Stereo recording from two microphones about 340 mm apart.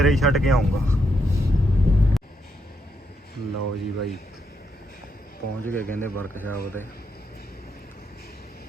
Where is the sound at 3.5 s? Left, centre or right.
Right.